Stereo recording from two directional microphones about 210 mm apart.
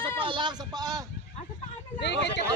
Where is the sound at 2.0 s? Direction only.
55° left (ahead or behind).